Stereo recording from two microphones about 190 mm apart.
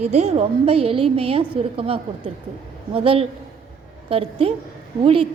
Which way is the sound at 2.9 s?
30° right (ahead or behind).